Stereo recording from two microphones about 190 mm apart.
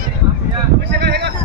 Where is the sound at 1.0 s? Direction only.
60° right (ahead or behind).